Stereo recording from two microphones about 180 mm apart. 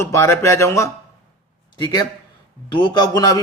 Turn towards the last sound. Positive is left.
turn(degrees=20)  # may be behind; listen again after turning